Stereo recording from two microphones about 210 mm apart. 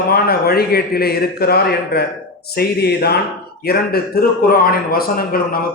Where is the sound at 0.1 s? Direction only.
45° left (ahead or behind).